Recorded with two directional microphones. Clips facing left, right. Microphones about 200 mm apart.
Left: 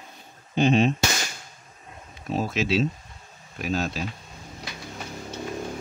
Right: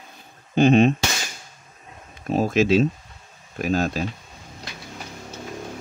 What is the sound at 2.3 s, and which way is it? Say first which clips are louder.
Speech: right 6 dB; 50° right (ahead or behind).